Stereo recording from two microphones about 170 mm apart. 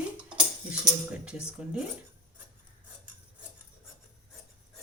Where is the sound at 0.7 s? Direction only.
5° right (ahead or behind).